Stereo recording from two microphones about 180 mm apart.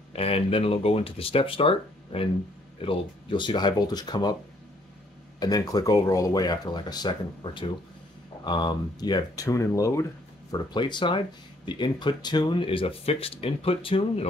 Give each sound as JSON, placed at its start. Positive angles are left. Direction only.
{"t": 0.1, "sound": "speech", "side_deg": 35}
{"t": 5.4, "sound": "speech", "side_deg": 20}